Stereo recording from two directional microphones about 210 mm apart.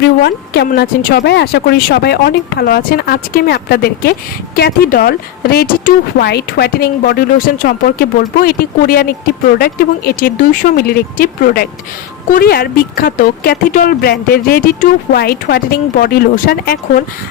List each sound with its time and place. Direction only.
0.0 s speech: 50° left (ahead or behind)